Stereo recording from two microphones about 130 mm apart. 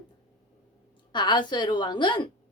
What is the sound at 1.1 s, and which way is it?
A woman's voice, 35° left (ahead or behind).